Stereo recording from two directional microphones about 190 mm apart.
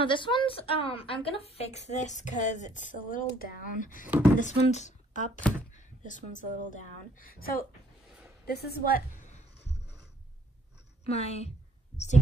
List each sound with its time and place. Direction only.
0.0 s a woman's voice: 25° left (ahead or behind); by 9.4 s 45° left (ahead or behind)
11.1 s a woman's voice: 35° left (ahead or behind)